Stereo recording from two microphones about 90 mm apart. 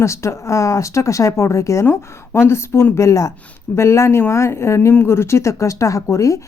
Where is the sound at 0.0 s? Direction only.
30° left (ahead or behind).